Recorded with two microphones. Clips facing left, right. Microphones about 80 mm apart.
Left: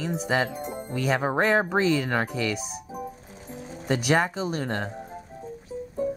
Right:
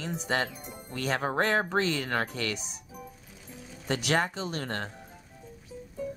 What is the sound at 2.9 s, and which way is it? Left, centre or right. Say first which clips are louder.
Music: left 9 dB; left.